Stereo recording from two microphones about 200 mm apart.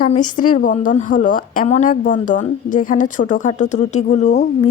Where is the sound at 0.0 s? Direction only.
40° left (ahead or behind).